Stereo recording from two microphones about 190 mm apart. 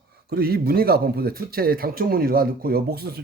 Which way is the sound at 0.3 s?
55° right (ahead or behind).